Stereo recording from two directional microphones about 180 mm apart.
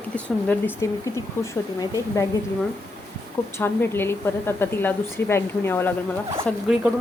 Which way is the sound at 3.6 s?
10° left (ahead or behind).